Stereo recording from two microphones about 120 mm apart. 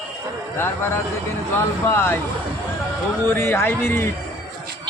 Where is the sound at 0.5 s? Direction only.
20° left (ahead or behind).